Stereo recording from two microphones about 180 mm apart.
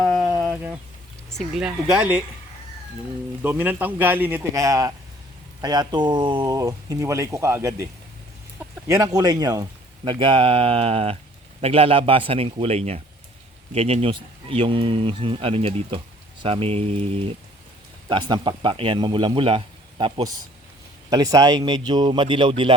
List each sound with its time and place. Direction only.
0.0 s a sound: centre (ahead or behind)
1.4 s speech: 5° right (ahead or behind)
3.4 s speech: 10° right (ahead or behind)
8.5 s chicken: 15° right (ahead or behind)
9.1 s speech: 20° right (ahead or behind)